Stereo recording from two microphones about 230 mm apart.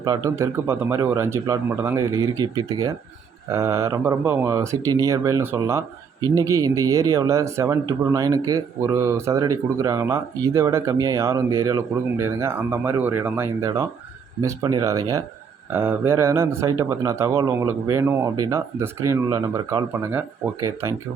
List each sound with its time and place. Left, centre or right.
0.0 s speech: centre